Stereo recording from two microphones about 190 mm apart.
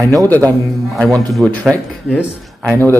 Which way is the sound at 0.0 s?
20° right (ahead or behind).